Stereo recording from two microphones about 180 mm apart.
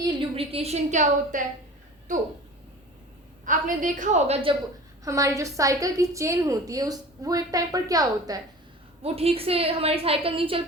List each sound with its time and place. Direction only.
0.0 s a woman's voice: 35° right (ahead or behind)
3.4 s a woman's voice: 45° right (ahead or behind)
5.0 s a woman's voice: 20° right (ahead or behind)
9.0 s a woman's voice: 35° right (ahead or behind)